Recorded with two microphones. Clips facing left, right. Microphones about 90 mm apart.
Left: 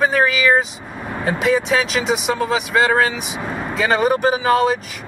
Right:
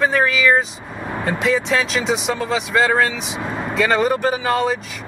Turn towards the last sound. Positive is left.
turn(degrees=0)  # may be behind; listen again after turning